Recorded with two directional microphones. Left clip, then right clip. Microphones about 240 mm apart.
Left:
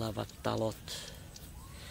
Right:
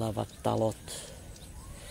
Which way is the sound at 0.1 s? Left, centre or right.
Right.